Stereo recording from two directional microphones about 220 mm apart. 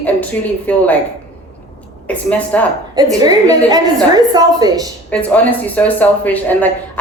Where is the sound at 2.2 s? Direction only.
5° left (ahead or behind).